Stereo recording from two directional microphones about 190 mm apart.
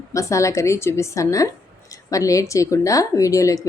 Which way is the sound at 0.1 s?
15° left (ahead or behind).